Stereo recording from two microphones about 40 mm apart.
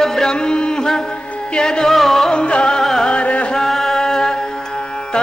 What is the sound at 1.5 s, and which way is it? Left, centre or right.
Music, left.